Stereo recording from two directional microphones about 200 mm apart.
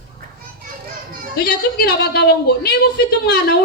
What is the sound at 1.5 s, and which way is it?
A woman's voice, 55° left (ahead or behind).